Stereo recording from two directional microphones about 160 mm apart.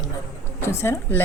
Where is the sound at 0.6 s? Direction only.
15° left (ahead or behind).